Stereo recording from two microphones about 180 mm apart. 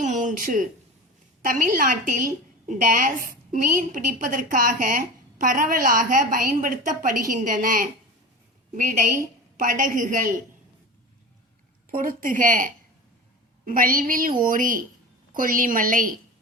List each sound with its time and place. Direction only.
0.0 s a sound: 45° right (ahead or behind)
1.5 s a woman's voice: 50° right (ahead or behind)
11.9 s a woman's voice: 50° right (ahead or behind)